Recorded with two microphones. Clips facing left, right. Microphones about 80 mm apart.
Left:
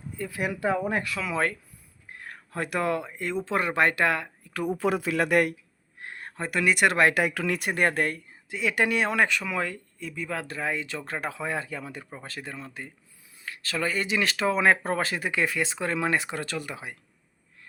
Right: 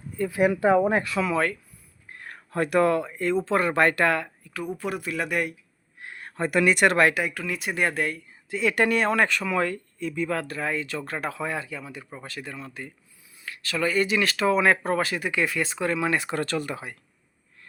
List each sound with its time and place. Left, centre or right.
0.3 s speech: right
1.3 s speech: left
2.2 s speech: centre
4.8 s speech: left
6.0 s a sound: left
6.5 s speech: centre
7.1 s speech: left
7.7 s speech: left
8.4 s speech: centre
10.4 s speech: left
11.6 s speech: left
12.2 s speech: left
16.3 s speech: centre